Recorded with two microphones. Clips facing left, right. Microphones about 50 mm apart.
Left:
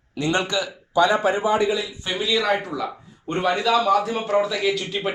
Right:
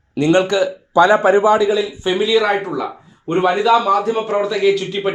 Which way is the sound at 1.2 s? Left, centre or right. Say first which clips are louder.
Right 7 dB; right.